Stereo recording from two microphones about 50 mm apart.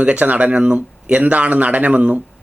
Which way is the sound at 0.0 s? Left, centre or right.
Right.